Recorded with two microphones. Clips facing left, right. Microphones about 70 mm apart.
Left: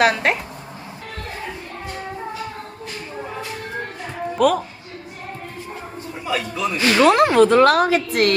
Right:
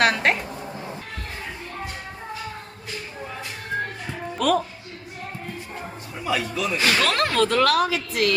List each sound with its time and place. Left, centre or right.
0.0 s a man's voice: centre
4.4 s speech: centre
6.2 s a man's voice: centre
6.7 s a woman's voice: left